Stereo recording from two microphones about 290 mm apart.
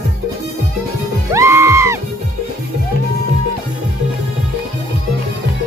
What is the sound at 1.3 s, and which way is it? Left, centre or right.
Music, centre.